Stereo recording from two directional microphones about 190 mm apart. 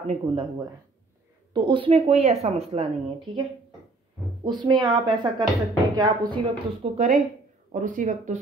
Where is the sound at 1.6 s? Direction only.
25° right (ahead or behind).